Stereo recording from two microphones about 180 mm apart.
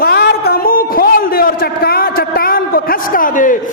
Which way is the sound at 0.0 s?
65° left (ahead or behind).